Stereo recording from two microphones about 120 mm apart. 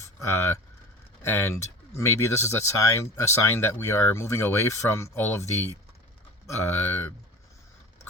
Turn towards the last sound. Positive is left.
turn(degrees=15)  # may be behind; listen again after turning